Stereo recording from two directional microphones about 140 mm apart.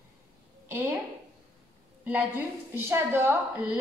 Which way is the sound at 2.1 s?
10° right (ahead or behind).